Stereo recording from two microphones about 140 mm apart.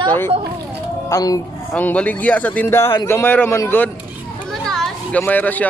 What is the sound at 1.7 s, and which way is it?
Speech, 10° left (ahead or behind).